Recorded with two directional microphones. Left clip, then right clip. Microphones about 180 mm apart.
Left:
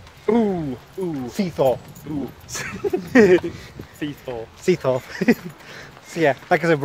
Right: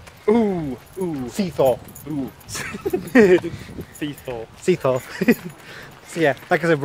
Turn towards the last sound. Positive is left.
turn(degrees=10)  # may be behind; listen again after turning